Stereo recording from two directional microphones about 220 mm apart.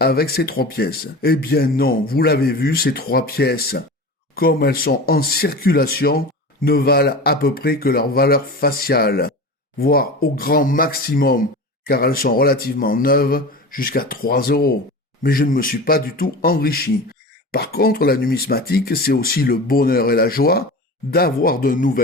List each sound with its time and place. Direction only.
0.0 s a man's voice: 45° left (ahead or behind)